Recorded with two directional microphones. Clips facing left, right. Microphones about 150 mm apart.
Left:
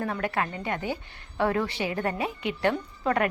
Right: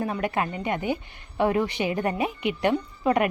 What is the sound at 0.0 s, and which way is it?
Speech, 15° right (ahead or behind).